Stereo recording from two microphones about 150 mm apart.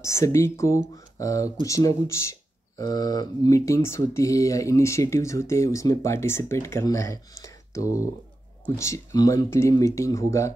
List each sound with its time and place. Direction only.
0.0 s speech: 20° left (ahead or behind)